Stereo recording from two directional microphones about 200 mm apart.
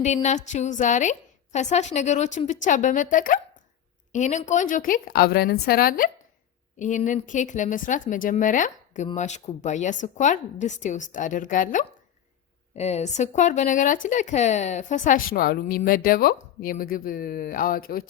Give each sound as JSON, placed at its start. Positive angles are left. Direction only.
{"t": 0.0, "sound": "speech", "side_deg": 35}